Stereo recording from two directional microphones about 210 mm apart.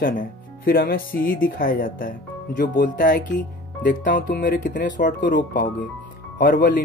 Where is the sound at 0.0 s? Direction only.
45° left (ahead or behind).